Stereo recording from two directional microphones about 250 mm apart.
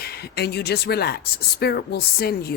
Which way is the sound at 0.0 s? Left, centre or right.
Left.